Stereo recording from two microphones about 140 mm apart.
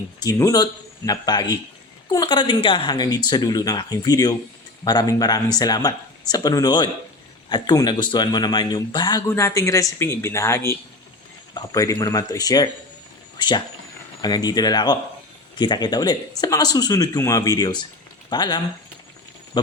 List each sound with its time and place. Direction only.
0.2 s speech: 25° left (ahead or behind)
14.2 s speech: 30° left (ahead or behind)